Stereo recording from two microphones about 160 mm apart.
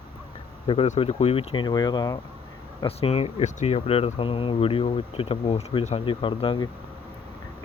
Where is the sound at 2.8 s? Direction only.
40° left (ahead or behind).